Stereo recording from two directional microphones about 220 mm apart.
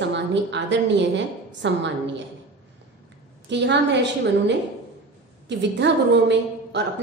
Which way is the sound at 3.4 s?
50° right (ahead or behind).